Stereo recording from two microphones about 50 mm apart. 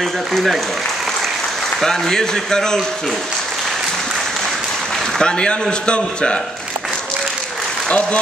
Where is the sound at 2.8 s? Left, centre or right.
Centre.